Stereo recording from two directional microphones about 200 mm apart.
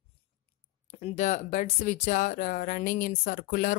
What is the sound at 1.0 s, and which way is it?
Speech, 35° left (ahead or behind).